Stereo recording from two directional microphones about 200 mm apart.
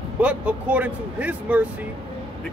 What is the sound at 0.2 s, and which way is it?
Speech, 5° right (ahead or behind).